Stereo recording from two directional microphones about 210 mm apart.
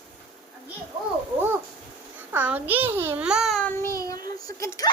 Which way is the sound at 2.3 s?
10° right (ahead or behind).